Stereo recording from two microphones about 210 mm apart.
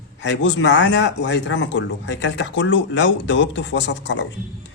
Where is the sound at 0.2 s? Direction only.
60° left (ahead or behind).